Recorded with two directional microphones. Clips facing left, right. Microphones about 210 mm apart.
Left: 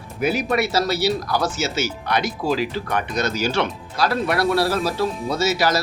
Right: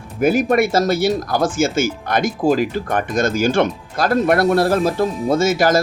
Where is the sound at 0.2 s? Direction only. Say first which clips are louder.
Right 6 dB; 50° right (ahead or behind).